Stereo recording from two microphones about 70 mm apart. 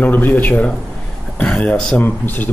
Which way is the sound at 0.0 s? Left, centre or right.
Left.